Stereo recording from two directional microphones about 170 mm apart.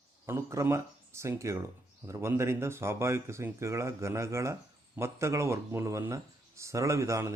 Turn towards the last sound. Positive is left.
turn(degrees=-15)  # may be behind; listen again after turning